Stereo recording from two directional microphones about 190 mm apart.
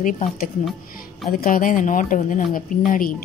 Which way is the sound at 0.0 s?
45° left (ahead or behind).